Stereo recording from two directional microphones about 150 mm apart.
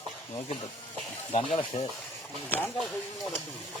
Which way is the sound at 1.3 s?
40° left (ahead or behind).